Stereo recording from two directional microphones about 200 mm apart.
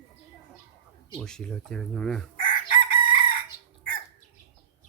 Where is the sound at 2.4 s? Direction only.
40° left (ahead or behind).